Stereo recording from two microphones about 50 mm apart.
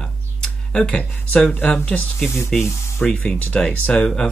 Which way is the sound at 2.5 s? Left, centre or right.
Centre.